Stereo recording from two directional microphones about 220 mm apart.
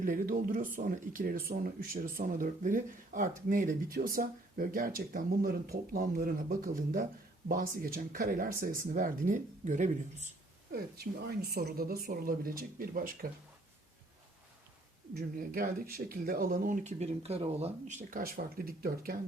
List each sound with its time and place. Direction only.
0.0 s speech: 40° right (ahead or behind)
10.7 s speech: 45° right (ahead or behind)
15.1 s speech: 40° right (ahead or behind)